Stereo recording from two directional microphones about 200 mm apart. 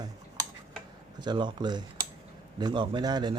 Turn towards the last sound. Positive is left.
turn(degrees=-20)  # may be behind; listen again after turning